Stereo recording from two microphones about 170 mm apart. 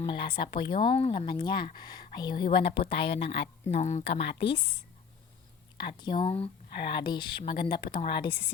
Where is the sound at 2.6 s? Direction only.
85° left.